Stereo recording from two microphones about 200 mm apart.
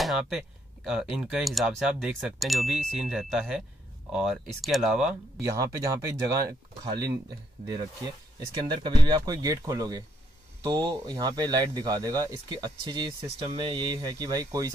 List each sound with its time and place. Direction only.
0.0 s speech: centre (ahead or behind)
5.4 s speech: 15° right (ahead or behind)